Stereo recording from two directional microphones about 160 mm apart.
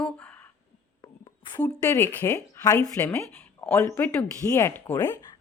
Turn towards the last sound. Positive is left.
turn(degrees=15)  # may be behind; listen again after turning